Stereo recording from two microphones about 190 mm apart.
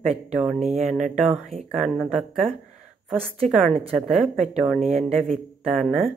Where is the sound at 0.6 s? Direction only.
35° right (ahead or behind).